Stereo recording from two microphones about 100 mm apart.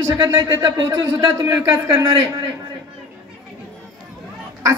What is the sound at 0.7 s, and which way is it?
A man's voice, 30° right (ahead or behind).